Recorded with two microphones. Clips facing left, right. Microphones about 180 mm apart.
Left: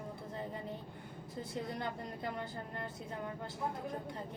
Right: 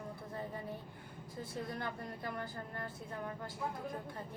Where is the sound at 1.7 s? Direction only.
20° left (ahead or behind).